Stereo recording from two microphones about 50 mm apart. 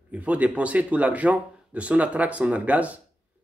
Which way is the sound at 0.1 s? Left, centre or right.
Right.